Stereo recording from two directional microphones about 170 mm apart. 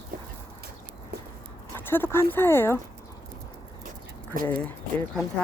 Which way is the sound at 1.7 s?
15° left (ahead or behind).